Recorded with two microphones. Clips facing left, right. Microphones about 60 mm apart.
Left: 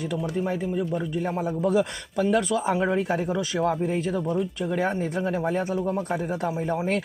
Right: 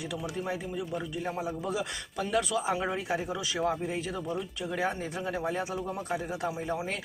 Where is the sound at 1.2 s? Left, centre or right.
Left.